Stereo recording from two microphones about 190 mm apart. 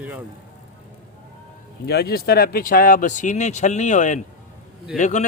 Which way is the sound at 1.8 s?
55° left (ahead or behind).